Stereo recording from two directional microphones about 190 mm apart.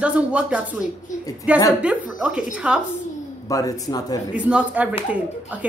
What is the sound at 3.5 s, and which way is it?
Speech, 20° left (ahead or behind).